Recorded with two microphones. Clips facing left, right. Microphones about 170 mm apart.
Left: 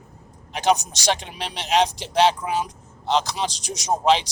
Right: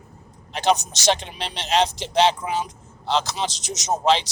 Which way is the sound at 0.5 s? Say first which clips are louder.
Even; 15° left (ahead or behind).